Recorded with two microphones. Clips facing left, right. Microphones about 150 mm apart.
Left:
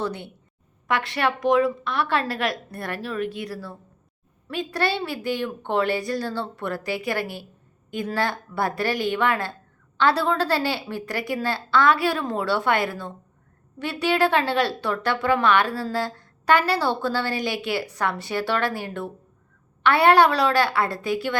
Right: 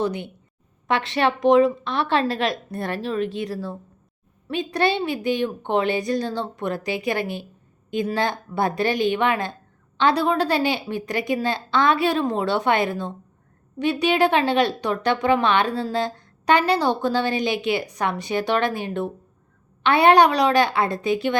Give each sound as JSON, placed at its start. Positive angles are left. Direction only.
{"t": 0.0, "sound": "a woman's voice", "side_deg": -15}